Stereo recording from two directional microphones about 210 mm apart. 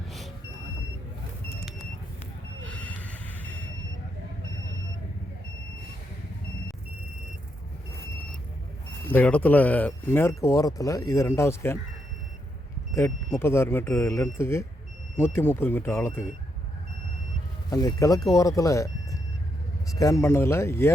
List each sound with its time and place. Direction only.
2.6 s a sound: 5° left (ahead or behind)
9.0 s speech: 10° left (ahead or behind)
12.9 s speech: 15° left (ahead or behind)
17.7 s speech: 15° left (ahead or behind)